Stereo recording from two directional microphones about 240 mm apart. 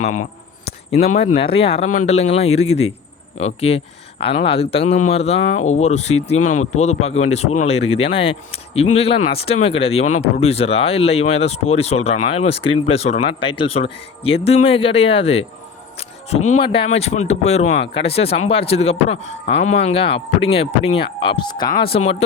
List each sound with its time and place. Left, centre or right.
1.1 s speech: left